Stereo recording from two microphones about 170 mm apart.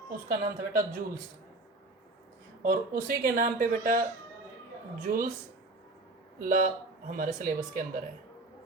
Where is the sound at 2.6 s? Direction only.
55° right (ahead or behind).